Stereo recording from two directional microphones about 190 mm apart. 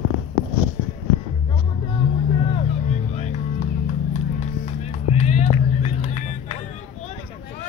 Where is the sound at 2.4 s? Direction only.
30° left (ahead or behind).